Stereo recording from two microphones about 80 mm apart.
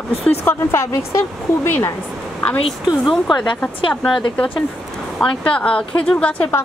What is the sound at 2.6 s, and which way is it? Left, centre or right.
Speech, centre.